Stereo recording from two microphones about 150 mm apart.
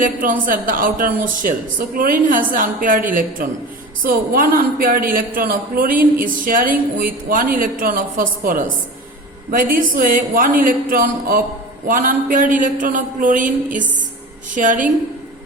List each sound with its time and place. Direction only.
0.0 s a man's voice: 65° right (ahead or behind)